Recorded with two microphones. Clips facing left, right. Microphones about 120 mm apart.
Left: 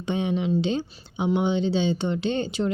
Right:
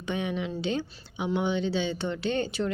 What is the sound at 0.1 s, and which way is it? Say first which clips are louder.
Speech: left 6 dB; 25° left (ahead or behind).